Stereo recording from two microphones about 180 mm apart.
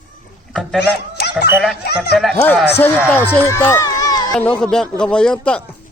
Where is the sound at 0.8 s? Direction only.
65° left (ahead or behind).